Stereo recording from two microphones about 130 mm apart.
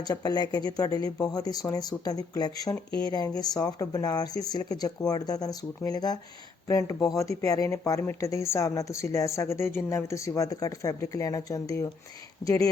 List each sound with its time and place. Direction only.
0.0 s speech: 30° left (ahead or behind)